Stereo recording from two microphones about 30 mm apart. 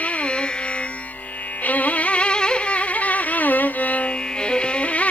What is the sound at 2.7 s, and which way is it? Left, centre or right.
Music, left.